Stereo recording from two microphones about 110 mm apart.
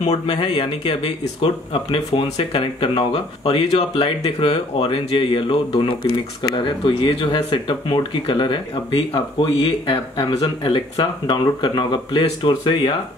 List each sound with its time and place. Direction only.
0.0 s speech: 80° left
0.4 s speech: 55° left (ahead or behind)